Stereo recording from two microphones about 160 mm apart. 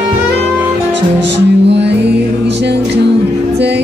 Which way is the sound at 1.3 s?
90° right.